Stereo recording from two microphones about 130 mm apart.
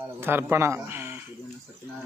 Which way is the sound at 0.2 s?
15° right (ahead or behind).